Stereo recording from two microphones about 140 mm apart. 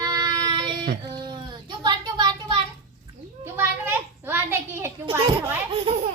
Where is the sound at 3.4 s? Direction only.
15° right (ahead or behind).